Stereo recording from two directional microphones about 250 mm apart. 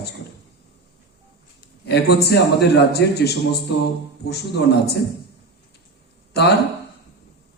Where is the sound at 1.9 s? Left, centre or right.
Left.